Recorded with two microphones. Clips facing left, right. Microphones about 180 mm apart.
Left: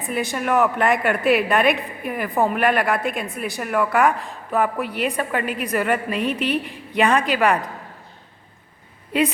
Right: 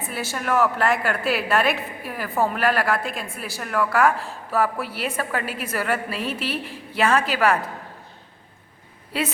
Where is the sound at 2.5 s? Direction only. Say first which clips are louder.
Left 2 dB; centre (ahead or behind).